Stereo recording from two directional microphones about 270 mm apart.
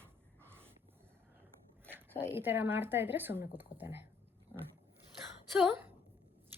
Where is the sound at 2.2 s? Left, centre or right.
Centre.